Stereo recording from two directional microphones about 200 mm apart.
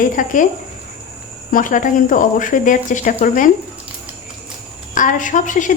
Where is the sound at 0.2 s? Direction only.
40° left (ahead or behind).